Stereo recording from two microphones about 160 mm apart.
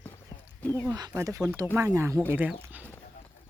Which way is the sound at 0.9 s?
20° right (ahead or behind).